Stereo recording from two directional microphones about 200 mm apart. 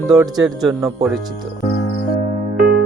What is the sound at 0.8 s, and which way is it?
Speech, 15° right (ahead or behind).